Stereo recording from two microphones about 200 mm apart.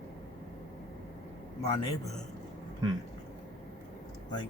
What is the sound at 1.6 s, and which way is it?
Speech, 15° left (ahead or behind).